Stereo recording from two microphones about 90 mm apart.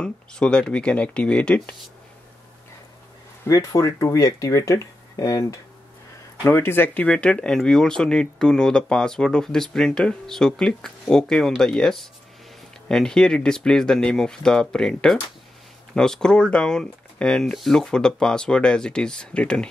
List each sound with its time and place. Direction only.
0.0 s speech: 10° left (ahead or behind)
3.4 s speech: 40° left (ahead or behind)
6.4 s speech: 25° left (ahead or behind)